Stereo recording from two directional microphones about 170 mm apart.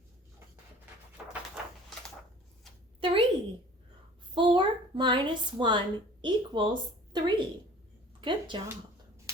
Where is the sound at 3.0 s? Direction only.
30° right (ahead or behind).